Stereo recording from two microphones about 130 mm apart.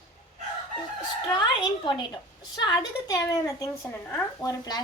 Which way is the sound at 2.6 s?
35° left (ahead or behind).